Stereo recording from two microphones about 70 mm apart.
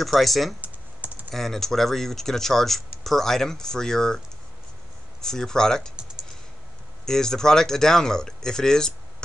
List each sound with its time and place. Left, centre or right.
0.0 s speech: centre
0.6 s typing: right
1.3 s speech: centre
5.2 s speech: centre
7.1 s speech: centre